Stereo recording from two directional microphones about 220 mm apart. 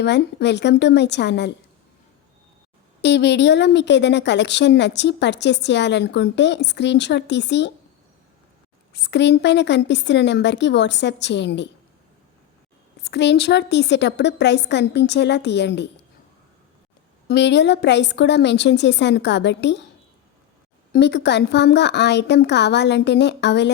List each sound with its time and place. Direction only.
0.0 s a woman's voice: 50° left (ahead or behind)
3.0 s a woman's voice: 50° left (ahead or behind)
8.9 s a woman's voice: 50° left (ahead or behind)
13.0 s a woman's voice: 50° left (ahead or behind)
17.2 s a woman's voice: 50° left (ahead or behind)
20.9 s a woman's voice: 50° left (ahead or behind)